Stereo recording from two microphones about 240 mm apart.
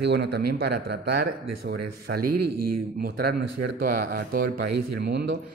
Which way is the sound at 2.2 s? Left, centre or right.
Right.